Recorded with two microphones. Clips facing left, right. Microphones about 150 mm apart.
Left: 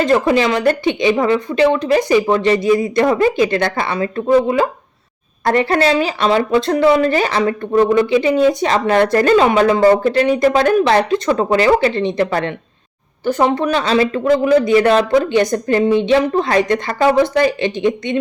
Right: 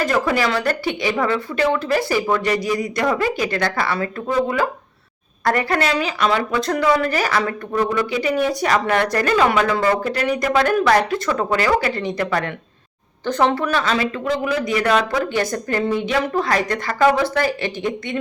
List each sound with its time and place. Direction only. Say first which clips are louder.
0.0 s speech: left 5 dB; 20° left (ahead or behind)
13.2 s speech: left 3 dB; 15° left (ahead or behind)